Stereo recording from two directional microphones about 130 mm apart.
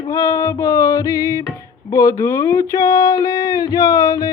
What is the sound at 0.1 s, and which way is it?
Speech, 25° left (ahead or behind).